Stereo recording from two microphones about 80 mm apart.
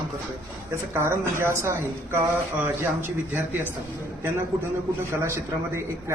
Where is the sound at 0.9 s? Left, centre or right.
Right.